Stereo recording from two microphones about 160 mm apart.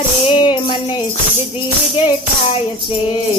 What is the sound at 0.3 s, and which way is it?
Music, 30° left (ahead or behind).